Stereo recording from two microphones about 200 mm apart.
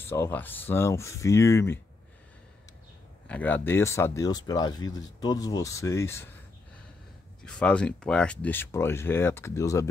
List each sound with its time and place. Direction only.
0.0 s speech: 10° left (ahead or behind)
3.3 s speech: 10° left (ahead or behind)
7.4 s speech: 5° left (ahead or behind)